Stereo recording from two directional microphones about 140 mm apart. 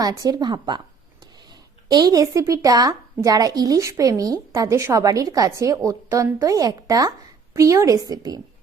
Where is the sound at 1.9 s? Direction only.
30° right (ahead or behind).